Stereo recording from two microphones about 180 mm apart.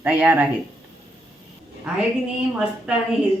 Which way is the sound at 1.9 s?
5° right (ahead or behind).